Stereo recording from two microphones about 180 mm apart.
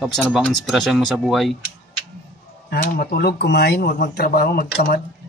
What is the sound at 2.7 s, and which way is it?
Speech, 60° left (ahead or behind).